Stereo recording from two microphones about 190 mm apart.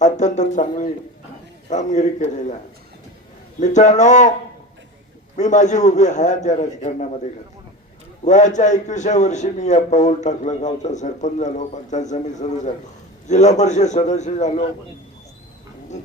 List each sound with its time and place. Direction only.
0.0 s a man's voice: 40° left (ahead or behind)
3.6 s a man's voice: 40° left (ahead or behind)
5.4 s a man's voice: 40° left (ahead or behind)
8.2 s a man's voice: 40° left (ahead or behind)